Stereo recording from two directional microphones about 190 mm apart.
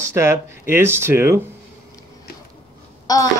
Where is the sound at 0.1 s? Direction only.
15° right (ahead or behind).